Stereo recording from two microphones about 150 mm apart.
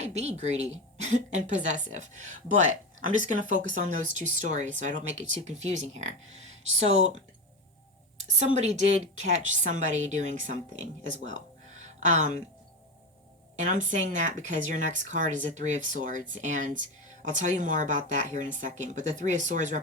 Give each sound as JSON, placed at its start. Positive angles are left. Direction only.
{"t": 0.0, "sound": "a woman's voice", "side_deg": -45}
{"t": 3.5, "sound": "a woman's voice", "side_deg": -55}
{"t": 8.4, "sound": "a woman's voice", "side_deg": -50}
{"t": 13.6, "sound": "speech", "side_deg": -55}